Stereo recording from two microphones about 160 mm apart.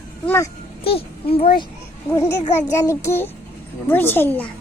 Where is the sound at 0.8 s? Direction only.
35° left (ahead or behind).